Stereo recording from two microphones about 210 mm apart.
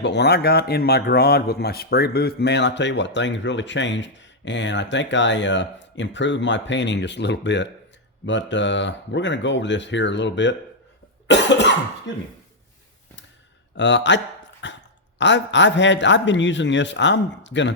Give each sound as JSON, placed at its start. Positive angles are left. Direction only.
{"t": 0.0, "sound": "a man's voice", "side_deg": 55}
{"t": 11.3, "sound": "cough", "side_deg": 55}
{"t": 13.7, "sound": "a man's voice", "side_deg": 60}
{"t": 14.6, "sound": "dog", "side_deg": 60}
{"t": 15.2, "sound": "a man's voice", "side_deg": 60}